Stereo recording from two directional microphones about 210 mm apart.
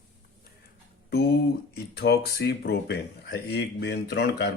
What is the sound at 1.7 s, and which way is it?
Speech, 50° left (ahead or behind).